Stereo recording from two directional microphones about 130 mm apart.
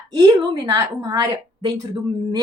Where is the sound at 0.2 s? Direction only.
30° right (ahead or behind).